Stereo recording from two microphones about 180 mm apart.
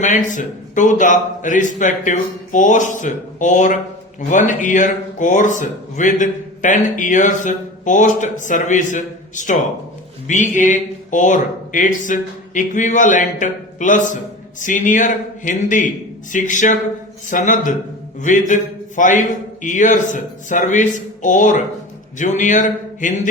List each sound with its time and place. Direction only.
0.0 s a man's voice: 45° left (ahead or behind)